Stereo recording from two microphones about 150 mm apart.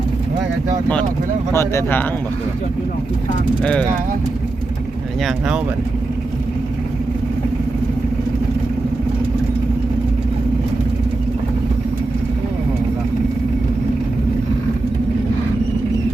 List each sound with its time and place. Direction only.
1.5 s speech: 15° left (ahead or behind)
3.6 s speech: 10° left (ahead or behind)